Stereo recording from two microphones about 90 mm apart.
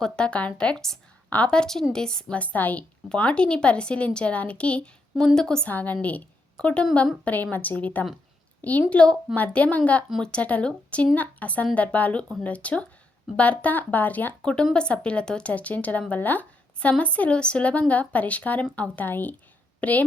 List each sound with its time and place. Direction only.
0.0 s a woman's voice: 10° left (ahead or behind)
5.7 s a woman's voice: 20° left (ahead or behind)